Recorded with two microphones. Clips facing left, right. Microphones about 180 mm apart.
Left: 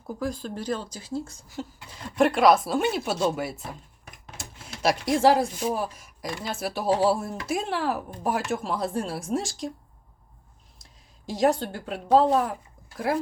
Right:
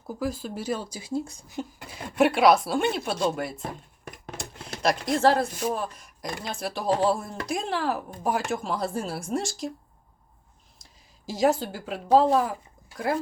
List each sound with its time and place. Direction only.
0.1 s speech: 5° right (ahead or behind)
2.1 s speech: 5° right (ahead or behind)
3.6 s a sound: 55° right (ahead or behind)
4.8 s speech: 10° left (ahead or behind)
11.3 s speech: centre (ahead or behind)